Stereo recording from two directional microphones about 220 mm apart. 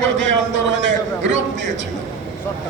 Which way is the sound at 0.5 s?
55° right (ahead or behind).